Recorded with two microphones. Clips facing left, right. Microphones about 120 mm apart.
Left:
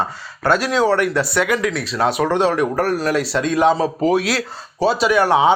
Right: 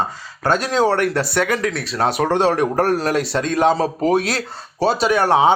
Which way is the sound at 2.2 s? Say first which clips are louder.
Right 2 dB; 30° right (ahead or behind).